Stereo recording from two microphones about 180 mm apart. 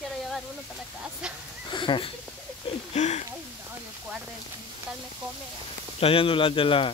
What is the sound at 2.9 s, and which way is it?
Speech, 40° left (ahead or behind).